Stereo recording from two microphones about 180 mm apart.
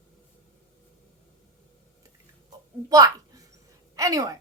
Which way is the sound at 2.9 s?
20° right (ahead or behind).